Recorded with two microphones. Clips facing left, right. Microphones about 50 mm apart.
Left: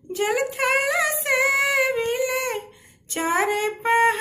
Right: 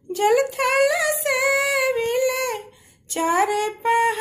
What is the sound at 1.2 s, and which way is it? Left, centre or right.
Female singing, left.